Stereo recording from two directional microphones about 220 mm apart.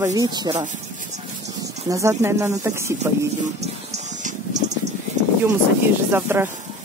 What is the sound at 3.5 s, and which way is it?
Water, 30° right (ahead or behind).